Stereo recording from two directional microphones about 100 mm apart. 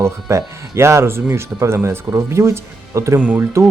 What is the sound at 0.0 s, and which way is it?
Speech, 30° right (ahead or behind).